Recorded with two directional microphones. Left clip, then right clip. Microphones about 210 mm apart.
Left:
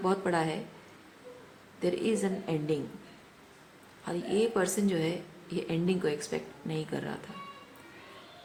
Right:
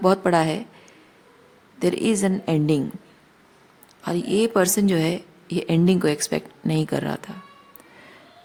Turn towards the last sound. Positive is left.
turn(degrees=-55)  # may be behind; listen again after turning